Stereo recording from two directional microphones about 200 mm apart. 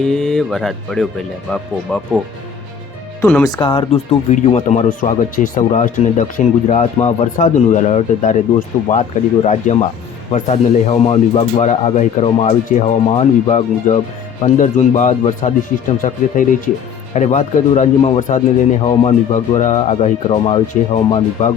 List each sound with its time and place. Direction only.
0.0 s speech: centre (ahead or behind)
3.2 s speech: 5° left (ahead or behind)
3.4 s speech: 20° left (ahead or behind)